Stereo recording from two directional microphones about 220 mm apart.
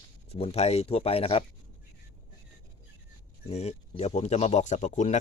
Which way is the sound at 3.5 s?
30° left (ahead or behind).